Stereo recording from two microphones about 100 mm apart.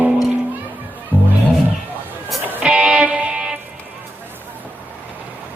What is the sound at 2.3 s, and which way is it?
Music, 10° right (ahead or behind).